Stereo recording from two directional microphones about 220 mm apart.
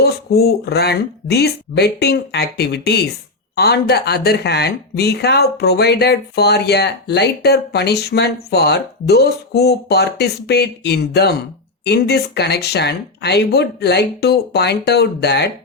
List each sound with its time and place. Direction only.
0.0 s speech: 45° left (ahead or behind)